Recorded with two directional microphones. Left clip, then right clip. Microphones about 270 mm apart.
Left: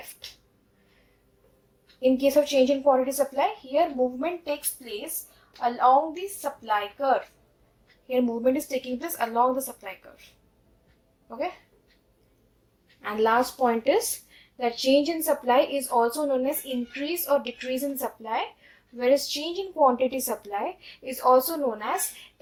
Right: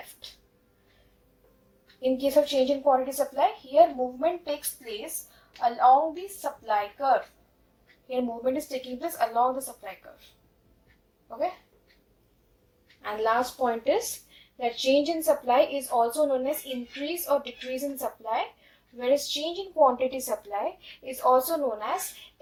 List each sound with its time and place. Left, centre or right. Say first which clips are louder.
2.0 s a woman's voice: left 2 dB; left
13.0 s a woman's voice: left 3 dB; left